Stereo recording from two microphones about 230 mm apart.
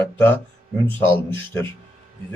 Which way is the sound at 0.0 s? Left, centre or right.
Centre.